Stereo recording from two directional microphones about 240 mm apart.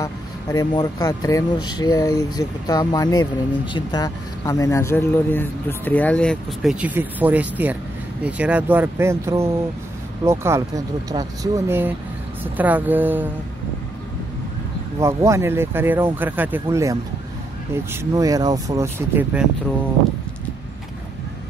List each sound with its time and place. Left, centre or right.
0.0 s speech: centre
15.0 s speech: centre